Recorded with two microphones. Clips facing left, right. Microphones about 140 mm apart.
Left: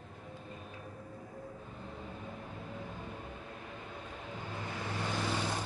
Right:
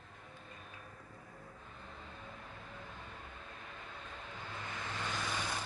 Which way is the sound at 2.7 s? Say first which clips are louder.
Left 6 dB; 20° left (ahead or behind).